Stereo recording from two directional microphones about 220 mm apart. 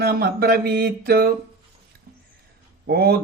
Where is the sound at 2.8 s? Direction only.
45° right (ahead or behind).